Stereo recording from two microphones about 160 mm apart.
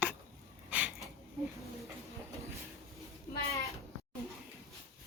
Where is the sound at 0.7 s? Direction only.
10° right (ahead or behind).